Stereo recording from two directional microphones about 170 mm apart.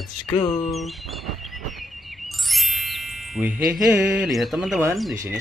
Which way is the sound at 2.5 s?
Centre (ahead or behind).